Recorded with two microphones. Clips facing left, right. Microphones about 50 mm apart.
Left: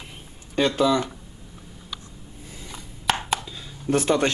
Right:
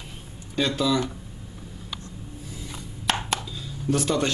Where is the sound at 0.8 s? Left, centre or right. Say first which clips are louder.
Left 3 dB; left.